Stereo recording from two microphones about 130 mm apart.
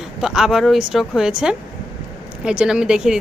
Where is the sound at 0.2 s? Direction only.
5° right (ahead or behind).